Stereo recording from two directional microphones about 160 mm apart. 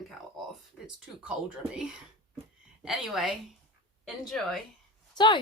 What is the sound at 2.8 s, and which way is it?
Speech, centre (ahead or behind).